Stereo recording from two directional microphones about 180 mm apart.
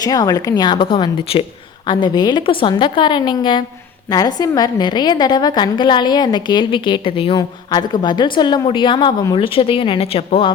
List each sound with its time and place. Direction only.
0.0 s a woman's voice: 20° left (ahead or behind)